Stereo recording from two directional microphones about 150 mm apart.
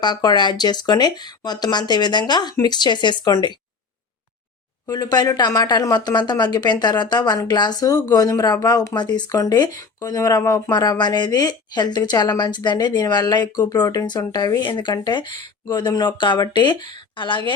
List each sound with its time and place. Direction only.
0.0 s speech: 30° left (ahead or behind)
4.9 s speech: 25° left (ahead or behind)